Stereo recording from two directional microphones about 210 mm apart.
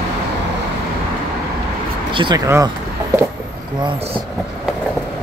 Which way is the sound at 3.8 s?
25° right (ahead or behind).